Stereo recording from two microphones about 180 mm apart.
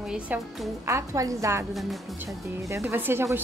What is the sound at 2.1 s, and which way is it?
Speech, 15° right (ahead or behind).